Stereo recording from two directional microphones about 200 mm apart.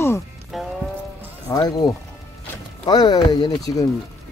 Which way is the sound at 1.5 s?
20° left (ahead or behind).